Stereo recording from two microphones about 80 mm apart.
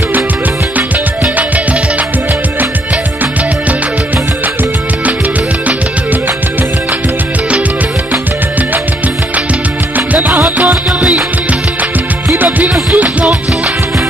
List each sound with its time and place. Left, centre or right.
9.9 s music: right
12.4 s music: right